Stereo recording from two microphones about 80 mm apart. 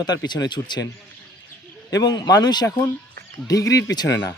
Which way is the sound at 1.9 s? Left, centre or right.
Left.